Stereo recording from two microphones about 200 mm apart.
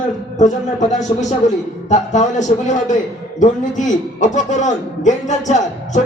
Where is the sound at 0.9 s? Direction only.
35° left (ahead or behind).